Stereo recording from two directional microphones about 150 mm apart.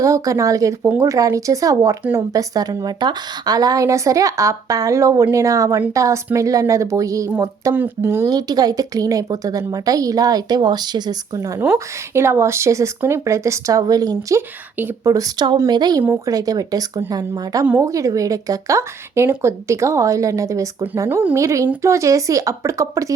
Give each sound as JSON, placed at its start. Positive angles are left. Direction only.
{"t": 0.0, "sound": "speech", "side_deg": -20}